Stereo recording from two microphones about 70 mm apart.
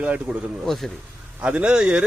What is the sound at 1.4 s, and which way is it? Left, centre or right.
Speech, centre.